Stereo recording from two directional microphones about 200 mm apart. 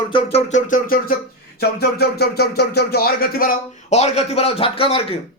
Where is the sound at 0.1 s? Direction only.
30° left (ahead or behind).